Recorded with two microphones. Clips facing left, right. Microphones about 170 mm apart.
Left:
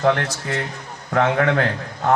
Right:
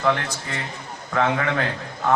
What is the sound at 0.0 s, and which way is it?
A man's voice, 60° left (ahead or behind).